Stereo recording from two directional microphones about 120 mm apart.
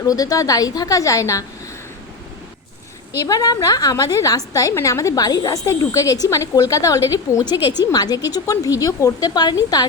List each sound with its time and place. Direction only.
0.0 s a woman's voice: 30° left (ahead or behind)
3.2 s a woman's voice: 30° left (ahead or behind)